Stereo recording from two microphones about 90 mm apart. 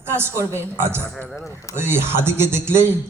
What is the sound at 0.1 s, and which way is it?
A man's voice, 25° right (ahead or behind).